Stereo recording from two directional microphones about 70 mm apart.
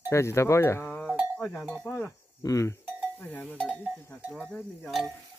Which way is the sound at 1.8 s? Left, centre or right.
Left.